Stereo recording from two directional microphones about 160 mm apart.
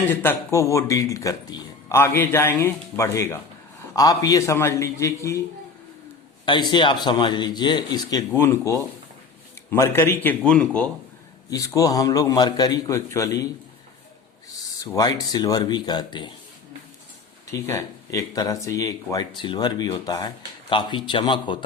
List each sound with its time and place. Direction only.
0.1 s a man's voice: 15° left (ahead or behind)
6.4 s speech: 30° left (ahead or behind)
8.3 s a man's voice: 15° left (ahead or behind)
11.5 s speech: 20° left (ahead or behind)
14.9 s speech: 25° left (ahead or behind)
17.5 s speech: 20° left (ahead or behind)